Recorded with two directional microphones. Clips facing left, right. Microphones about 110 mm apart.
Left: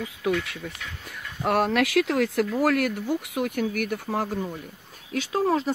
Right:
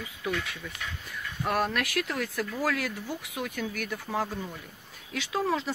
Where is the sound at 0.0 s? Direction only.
75° left (ahead or behind).